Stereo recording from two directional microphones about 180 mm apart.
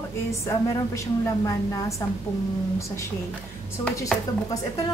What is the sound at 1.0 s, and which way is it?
Speech, 15° left (ahead or behind).